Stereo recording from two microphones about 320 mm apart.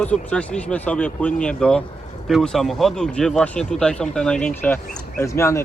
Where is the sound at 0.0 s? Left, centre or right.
Centre.